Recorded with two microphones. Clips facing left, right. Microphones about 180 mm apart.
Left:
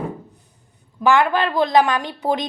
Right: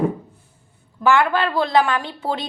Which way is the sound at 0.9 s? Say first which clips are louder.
Left 1 dB; 15° left (ahead or behind).